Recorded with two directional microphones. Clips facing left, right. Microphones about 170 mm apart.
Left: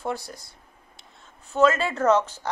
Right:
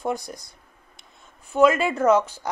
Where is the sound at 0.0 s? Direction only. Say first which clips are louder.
Right 3 dB; 15° right (ahead or behind).